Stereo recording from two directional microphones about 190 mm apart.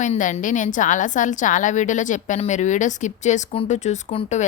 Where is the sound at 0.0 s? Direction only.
40° left (ahead or behind).